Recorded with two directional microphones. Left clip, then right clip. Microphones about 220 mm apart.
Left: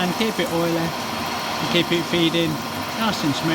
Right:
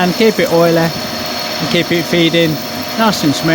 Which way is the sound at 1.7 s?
35° right (ahead or behind).